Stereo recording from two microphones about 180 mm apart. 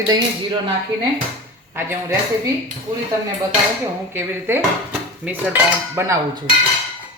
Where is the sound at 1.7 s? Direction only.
15° right (ahead or behind).